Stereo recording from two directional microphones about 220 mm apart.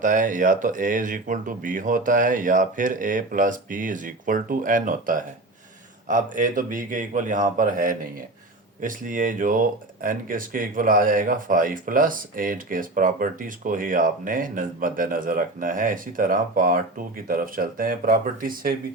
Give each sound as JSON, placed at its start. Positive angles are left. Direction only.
{"t": 0.0, "sound": "speech", "side_deg": -35}